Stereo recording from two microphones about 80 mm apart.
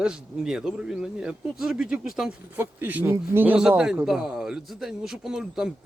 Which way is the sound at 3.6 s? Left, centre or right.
Centre.